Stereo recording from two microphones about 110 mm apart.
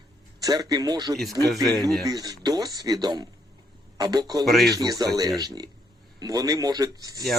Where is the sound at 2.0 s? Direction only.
35° right (ahead or behind).